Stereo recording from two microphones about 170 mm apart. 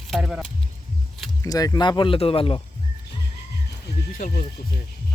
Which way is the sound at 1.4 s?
20° left (ahead or behind).